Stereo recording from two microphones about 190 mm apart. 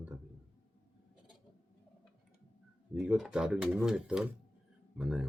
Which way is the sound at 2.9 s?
5° right (ahead or behind).